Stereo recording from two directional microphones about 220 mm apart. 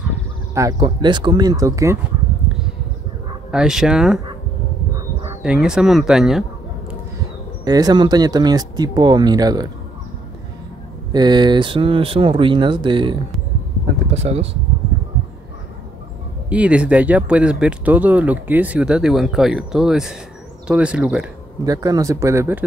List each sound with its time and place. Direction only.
0.6 s speech: 15° right (ahead or behind)
3.5 s speech: 5° right (ahead or behind)
5.4 s speech: 5° right (ahead or behind)
7.6 s speech: 15° right (ahead or behind)
11.1 s speech: 20° right (ahead or behind)
14.1 s speech: 30° right (ahead or behind)
16.4 s speech: 5° right (ahead or behind)
21.6 s speech: 15° right (ahead or behind)